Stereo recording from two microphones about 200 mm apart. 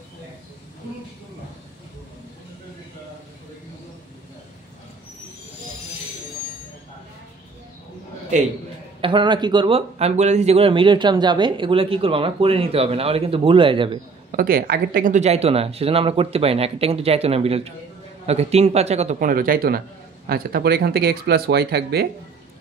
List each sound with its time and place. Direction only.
9.0 s speech: 25° right (ahead or behind)
14.3 s a man's voice: 45° right (ahead or behind)